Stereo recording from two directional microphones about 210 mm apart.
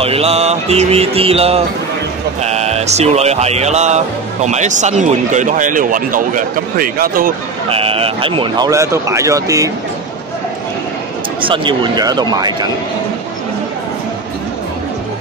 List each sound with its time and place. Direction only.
0.0 s mantra: 30° right (ahead or behind)
2.4 s speech: 30° right (ahead or behind)
7.7 s speech: 25° right (ahead or behind)
11.4 s mantra: 25° right (ahead or behind)